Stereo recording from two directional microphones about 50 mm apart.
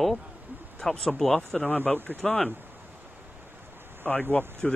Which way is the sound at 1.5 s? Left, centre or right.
Left.